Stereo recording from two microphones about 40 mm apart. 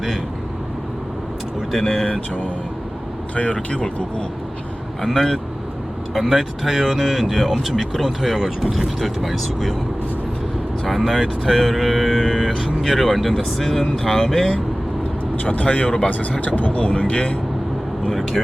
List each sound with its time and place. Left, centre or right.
1.7 s speech: centre
3.3 s speech: left
5.0 s speech: centre
10.8 s speech: centre
15.4 s speech: left
16.4 s speech: left
16.8 s speech: left
18.1 s speech: centre